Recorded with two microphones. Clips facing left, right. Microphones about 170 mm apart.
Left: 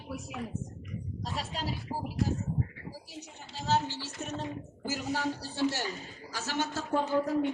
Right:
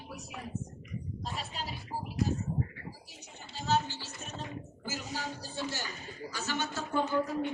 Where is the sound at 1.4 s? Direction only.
90° left.